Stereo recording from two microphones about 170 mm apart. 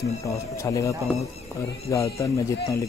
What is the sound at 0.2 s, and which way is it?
Speech, 20° left (ahead or behind).